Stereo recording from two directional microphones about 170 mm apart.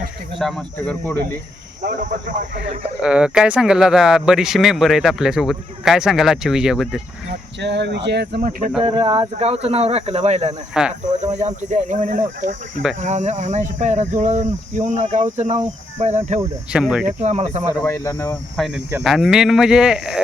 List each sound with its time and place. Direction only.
0.3 s speech: centre (ahead or behind)
1.8 s speech: 50° right (ahead or behind)
3.0 s speech: 5° right (ahead or behind)
7.3 s speech: 90° right; by 8.7 s 55° right (ahead or behind)
8.9 s speech: 30° right (ahead or behind)
10.8 s speech: 5° right (ahead or behind)
11.2 s speech: 40° right (ahead or behind)
16.7 s speech: 5° right (ahead or behind)
17.2 s speech: 40° right (ahead or behind)
17.8 s speech: 20° left (ahead or behind)
18.5 s speech: centre (ahead or behind)